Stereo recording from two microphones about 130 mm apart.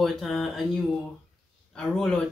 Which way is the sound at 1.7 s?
5° left (ahead or behind).